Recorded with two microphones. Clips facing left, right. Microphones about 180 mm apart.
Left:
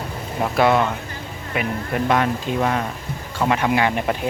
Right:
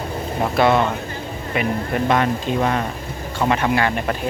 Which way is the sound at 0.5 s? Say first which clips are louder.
Right 1 dB; 10° left (ahead or behind).